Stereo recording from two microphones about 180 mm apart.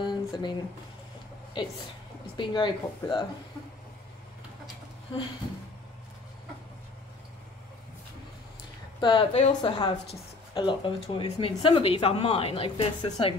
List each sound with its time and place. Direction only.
0.0 s a sound: 25° left (ahead or behind)
1.6 s speech: 25° left (ahead or behind)
9.0 s a woman's voice: 25° left (ahead or behind)